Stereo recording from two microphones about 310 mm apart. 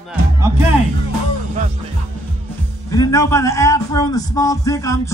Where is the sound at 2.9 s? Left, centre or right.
Centre.